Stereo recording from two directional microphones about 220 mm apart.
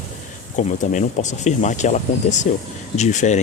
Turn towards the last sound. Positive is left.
turn(degrees=35)  # may be behind; listen again after turning